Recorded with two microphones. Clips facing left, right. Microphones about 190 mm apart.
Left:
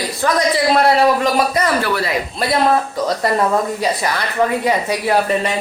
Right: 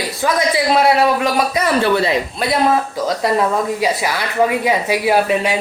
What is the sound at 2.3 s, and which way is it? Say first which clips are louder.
Speech: left 2 dB; centre (ahead or behind).